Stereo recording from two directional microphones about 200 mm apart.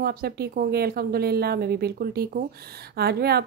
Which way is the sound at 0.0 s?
50° right (ahead or behind).